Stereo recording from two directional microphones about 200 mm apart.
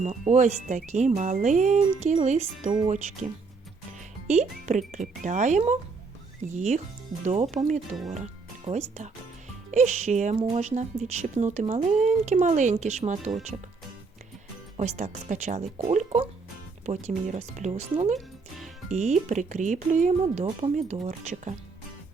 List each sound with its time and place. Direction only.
0.0 s speech: 35° right (ahead or behind)
4.3 s speech: 35° right (ahead or behind)
14.8 s speech: 35° right (ahead or behind)